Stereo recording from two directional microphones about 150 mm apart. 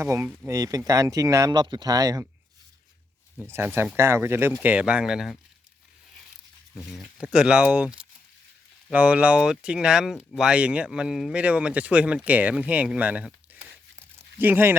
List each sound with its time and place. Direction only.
0.0 s speech: 15° right (ahead or behind)
3.4 s speech: 15° right (ahead or behind)
6.7 s speech: 5° right (ahead or behind)